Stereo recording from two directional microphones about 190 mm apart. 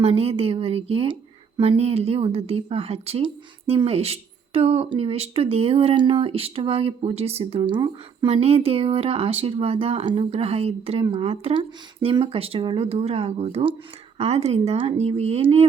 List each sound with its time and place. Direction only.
0.0 s a woman's voice: 30° right (ahead or behind)